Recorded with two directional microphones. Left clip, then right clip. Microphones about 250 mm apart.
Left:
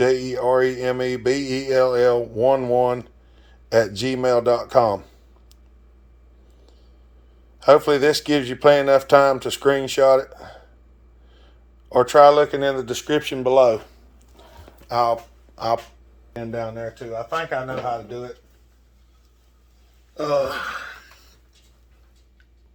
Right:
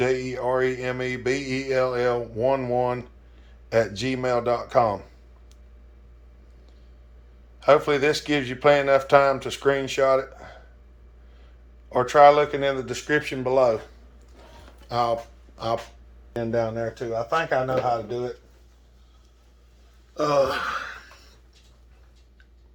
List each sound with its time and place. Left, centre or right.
0.0 s speech: left
7.6 s speech: left
11.9 s speech: left
14.8 s speech: centre
16.3 s speech: centre
20.1 s gasp: centre